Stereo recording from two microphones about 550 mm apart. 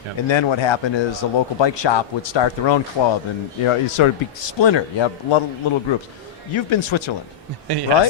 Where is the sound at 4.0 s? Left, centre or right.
Left.